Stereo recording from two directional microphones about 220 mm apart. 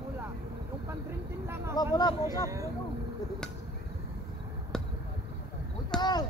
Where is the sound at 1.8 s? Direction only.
15° left (ahead or behind).